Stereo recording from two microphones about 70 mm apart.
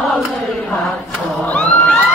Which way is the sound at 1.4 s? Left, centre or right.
Centre.